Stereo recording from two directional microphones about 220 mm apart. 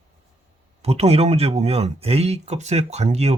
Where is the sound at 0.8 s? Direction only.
30° right (ahead or behind).